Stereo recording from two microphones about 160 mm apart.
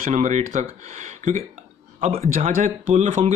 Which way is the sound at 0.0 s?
50° right (ahead or behind).